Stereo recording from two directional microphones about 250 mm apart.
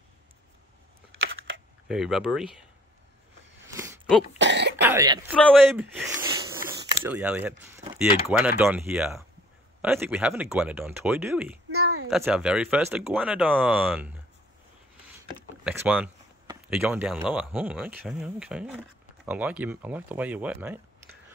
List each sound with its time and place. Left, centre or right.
1.2 s computer keyboard: right
1.9 s speech: centre
3.6 s a sound: centre
4.4 s speech: right
4.8 s speech: centre
5.3 s speech: centre
6.1 s a sound: centre
7.1 s speech: centre
11.7 s a sound: right
12.1 s speech: centre
15.6 s speech: centre